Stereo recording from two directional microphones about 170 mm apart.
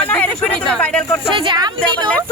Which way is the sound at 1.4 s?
25° right (ahead or behind).